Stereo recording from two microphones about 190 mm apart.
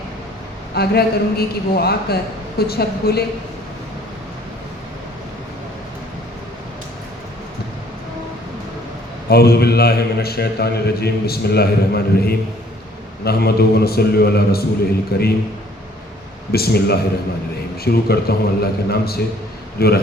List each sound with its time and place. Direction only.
0.8 s a man's voice: 55° left (ahead or behind)
9.3 s a man's voice: 55° left (ahead or behind)
16.5 s a man's voice: 55° left (ahead or behind)